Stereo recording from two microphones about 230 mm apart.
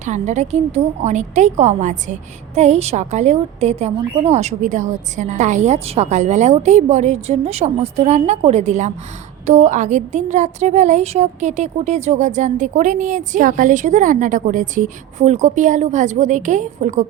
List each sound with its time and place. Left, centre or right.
0.0 s a woman's voice: right